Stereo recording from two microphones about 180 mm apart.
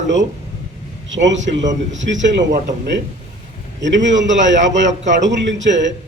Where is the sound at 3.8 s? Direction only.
90° right.